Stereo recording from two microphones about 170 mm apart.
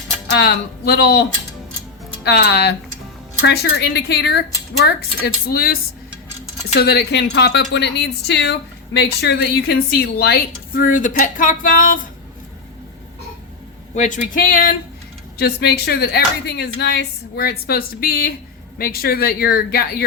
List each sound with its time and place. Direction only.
0.3 s a woman's voice: 75° left (ahead or behind); by 11.9 s 50° left (ahead or behind)
13.9 s speech: 45° left (ahead or behind)
14.3 s speech: 55° left (ahead or behind)
15.4 s a woman's voice: 70° left (ahead or behind)